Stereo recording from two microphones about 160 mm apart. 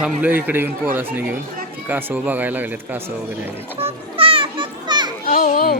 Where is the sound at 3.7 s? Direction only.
35° right (ahead or behind).